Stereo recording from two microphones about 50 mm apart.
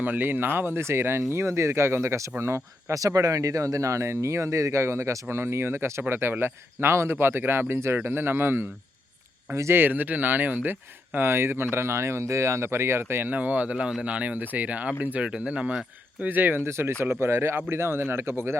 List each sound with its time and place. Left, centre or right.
0.0 s speech: right
9.7 s speech: right
13.3 s speech: right
13.7 s speech: centre
14.0 s speech: right
16.2 s speech: right
16.6 s speech: right